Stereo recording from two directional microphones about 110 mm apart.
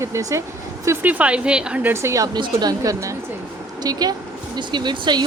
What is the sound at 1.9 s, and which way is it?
Speech, 25° right (ahead or behind).